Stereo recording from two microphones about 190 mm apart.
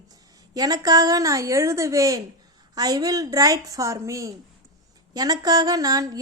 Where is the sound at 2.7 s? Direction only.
20° right (ahead or behind).